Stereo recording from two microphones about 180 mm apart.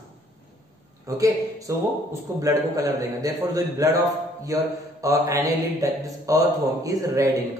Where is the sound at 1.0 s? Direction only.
20° right (ahead or behind).